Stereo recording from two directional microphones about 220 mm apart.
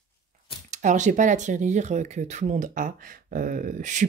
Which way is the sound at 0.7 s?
35° right (ahead or behind).